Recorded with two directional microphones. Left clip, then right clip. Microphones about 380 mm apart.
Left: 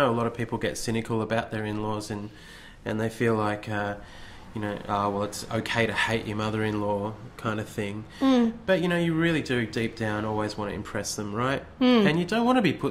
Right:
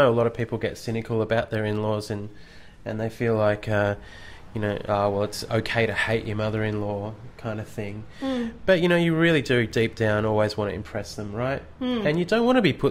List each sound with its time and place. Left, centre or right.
0.0 s speech: centre
8.2 s speech: left
8.6 s speech: centre
10.8 s speech: centre